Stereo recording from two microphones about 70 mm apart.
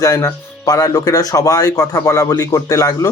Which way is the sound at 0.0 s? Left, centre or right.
Left.